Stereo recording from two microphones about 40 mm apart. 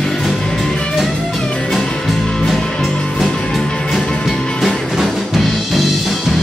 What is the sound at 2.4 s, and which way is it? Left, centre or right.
Music, centre.